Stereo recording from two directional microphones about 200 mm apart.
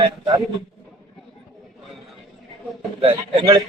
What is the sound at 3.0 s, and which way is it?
Speech, 25° right (ahead or behind).